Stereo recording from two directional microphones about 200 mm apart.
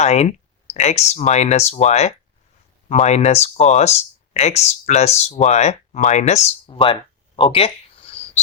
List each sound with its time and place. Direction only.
0.0 s speech: 35° left (ahead or behind)